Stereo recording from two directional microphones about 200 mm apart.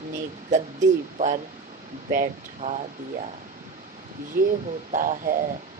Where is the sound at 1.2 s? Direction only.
40° right (ahead or behind).